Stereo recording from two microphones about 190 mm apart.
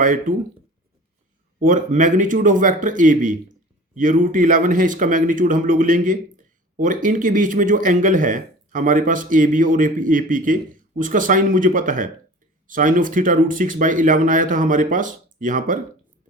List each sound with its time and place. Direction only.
0.0 s speech: 45° right (ahead or behind)
1.5 s speech: 45° right (ahead or behind)